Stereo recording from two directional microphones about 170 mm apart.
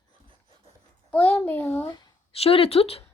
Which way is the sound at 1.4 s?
15° left (ahead or behind).